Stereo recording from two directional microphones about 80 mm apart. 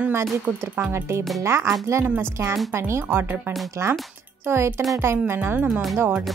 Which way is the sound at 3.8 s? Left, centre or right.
Right.